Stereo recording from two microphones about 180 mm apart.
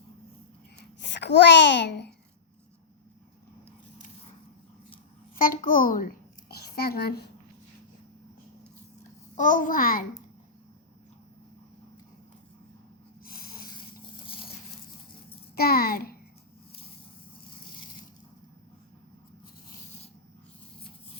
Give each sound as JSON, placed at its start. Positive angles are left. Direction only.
{"t": 0.8, "sound": "a child's voice", "side_deg": 75}
{"t": 5.4, "sound": "a child's voice", "side_deg": 50}
{"t": 6.5, "sound": "a sound", "side_deg": 60}
{"t": 9.3, "sound": "a child's voice", "side_deg": 45}
{"t": 13.2, "sound": "snort", "side_deg": 55}
{"t": 14.3, "sound": "a sound", "side_deg": 30}
{"t": 15.5, "sound": "a child's voice", "side_deg": 60}